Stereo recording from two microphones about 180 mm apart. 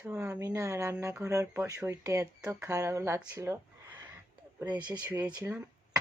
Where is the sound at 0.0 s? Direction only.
15° right (ahead or behind).